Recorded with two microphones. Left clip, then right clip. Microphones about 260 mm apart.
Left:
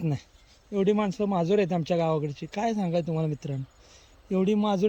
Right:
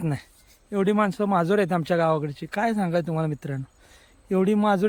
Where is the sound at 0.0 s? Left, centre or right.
Centre.